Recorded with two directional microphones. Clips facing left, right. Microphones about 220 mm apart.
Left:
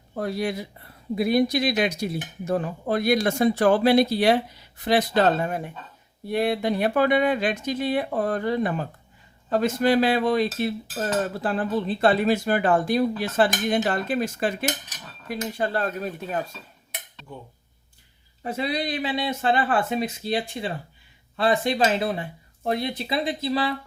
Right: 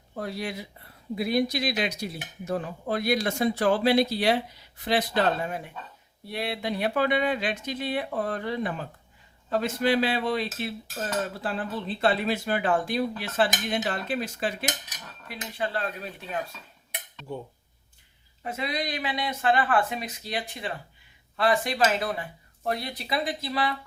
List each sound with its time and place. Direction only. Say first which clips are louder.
0.2 s cutlery: left 6 dB; 45° left (ahead or behind)
18.4 s speech: left 4 dB; 35° left (ahead or behind)